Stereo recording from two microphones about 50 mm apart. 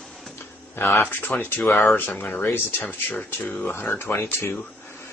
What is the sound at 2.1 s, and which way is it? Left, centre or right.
Speech, left.